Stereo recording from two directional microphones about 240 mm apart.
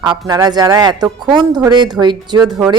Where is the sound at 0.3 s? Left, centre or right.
Centre.